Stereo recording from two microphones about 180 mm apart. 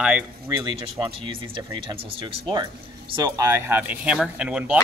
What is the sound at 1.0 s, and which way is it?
A man's voice, 25° right (ahead or behind).